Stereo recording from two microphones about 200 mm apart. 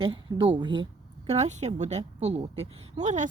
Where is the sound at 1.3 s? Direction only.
35° right (ahead or behind).